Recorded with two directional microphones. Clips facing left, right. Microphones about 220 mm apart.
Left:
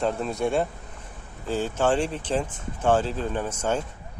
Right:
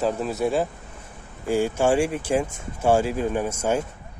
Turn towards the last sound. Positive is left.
turn(degrees=-10)  # may be behind; listen again after turning